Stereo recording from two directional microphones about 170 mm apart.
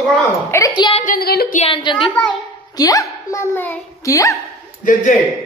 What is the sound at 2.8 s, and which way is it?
A child's voice, 20° left (ahead or behind).